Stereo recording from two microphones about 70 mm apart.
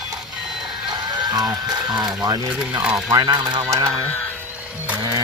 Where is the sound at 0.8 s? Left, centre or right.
Right.